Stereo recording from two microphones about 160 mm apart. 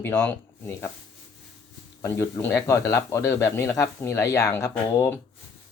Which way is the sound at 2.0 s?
15° left (ahead or behind).